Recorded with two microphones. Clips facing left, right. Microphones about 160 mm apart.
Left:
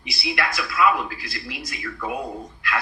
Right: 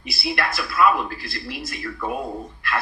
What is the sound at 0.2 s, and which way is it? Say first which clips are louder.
Speech: right 1 dB; 45° right (ahead or behind).